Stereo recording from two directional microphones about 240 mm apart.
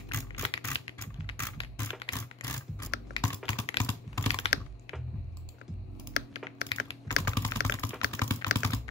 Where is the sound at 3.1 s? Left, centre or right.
Left.